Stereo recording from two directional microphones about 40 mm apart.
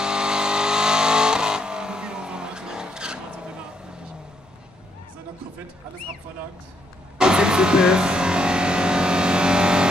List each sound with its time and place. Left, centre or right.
0.0 s vehicle: centre
7.2 s vehicle: centre